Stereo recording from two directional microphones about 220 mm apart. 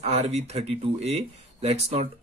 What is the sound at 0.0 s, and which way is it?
Speech, 30° right (ahead or behind).